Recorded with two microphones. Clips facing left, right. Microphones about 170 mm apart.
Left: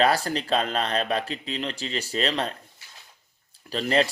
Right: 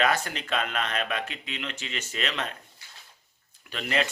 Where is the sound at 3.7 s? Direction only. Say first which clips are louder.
Left 6 dB; 35° left (ahead or behind).